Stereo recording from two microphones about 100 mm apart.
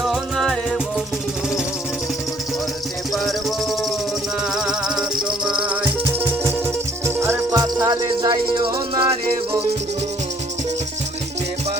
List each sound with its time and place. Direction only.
0.0 s music: centre (ahead or behind)
3.1 s music: centre (ahead or behind)
7.0 s music: 25° right (ahead or behind); by 9.0 s 55° right (ahead or behind)